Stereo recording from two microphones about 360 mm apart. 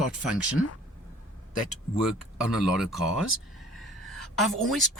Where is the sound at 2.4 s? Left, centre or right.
Centre.